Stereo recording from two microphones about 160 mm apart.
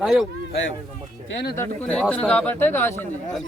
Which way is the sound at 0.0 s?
Centre (ahead or behind).